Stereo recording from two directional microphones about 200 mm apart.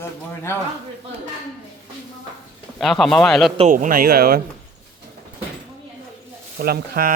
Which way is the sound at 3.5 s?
35° right (ahead or behind).